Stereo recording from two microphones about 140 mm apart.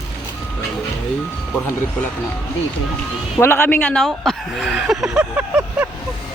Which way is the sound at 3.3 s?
15° left (ahead or behind).